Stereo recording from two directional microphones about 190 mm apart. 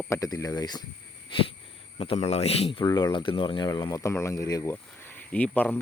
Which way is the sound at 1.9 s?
30° left (ahead or behind).